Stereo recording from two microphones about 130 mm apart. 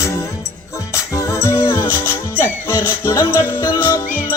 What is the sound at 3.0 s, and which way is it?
Music, 15° left (ahead or behind).